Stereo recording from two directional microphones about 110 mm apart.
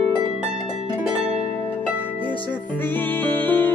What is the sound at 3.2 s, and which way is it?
Music, 15° left (ahead or behind).